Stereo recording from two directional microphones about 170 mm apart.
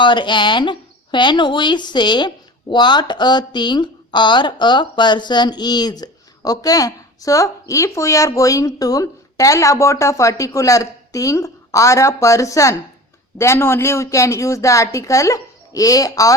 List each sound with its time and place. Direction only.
0.0 s a woman's voice: 25° left (ahead or behind)